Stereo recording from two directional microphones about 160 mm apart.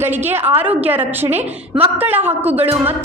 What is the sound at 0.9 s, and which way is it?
A woman's voice, 10° right (ahead or behind).